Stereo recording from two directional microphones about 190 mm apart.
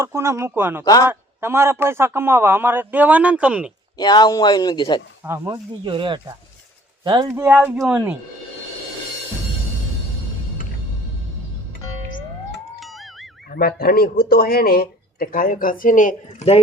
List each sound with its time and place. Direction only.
0.0 s a man's voice: 15° right (ahead or behind)
3.9 s speech: 20° left (ahead or behind)
5.2 s a man's voice: 15° right (ahead or behind)
5.8 s a man's voice: 25° right (ahead or behind); by 8.1 s 5° right (ahead or behind)
12.8 s music: centre (ahead or behind)
13.5 s speech: 55° left (ahead or behind)